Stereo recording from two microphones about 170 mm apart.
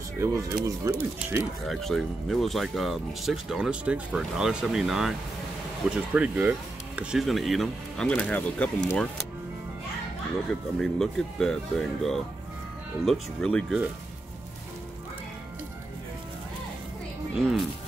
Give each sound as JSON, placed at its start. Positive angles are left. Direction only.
{"t": 0.7, "sound": "speech", "side_deg": -20}
{"t": 1.7, "sound": "speech", "side_deg": 0}
{"t": 10.8, "sound": "speech", "side_deg": 5}
{"t": 17.4, "sound": "speech", "side_deg": 0}